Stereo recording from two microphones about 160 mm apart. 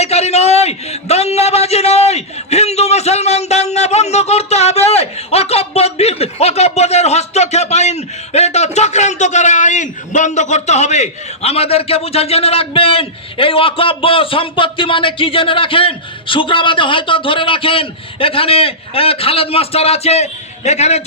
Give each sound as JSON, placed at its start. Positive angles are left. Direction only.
{"t": 0.0, "sound": "a man's voice", "side_deg": 40}